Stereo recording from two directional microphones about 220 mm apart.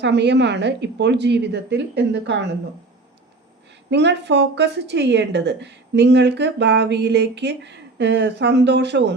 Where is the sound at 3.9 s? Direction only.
50° right (ahead or behind).